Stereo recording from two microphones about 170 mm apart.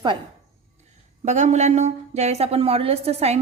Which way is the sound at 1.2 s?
45° right (ahead or behind).